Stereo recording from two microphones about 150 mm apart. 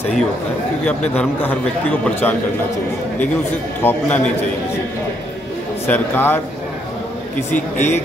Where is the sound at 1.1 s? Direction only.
10° left (ahead or behind).